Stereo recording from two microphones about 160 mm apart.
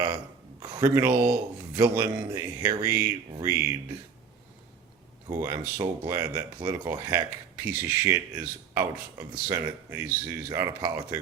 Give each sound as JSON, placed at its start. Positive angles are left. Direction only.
{"t": 0.6, "sound": "a sound", "side_deg": -20}
{"t": 1.7, "sound": "speech", "side_deg": -20}
{"t": 5.3, "sound": "speech", "side_deg": -20}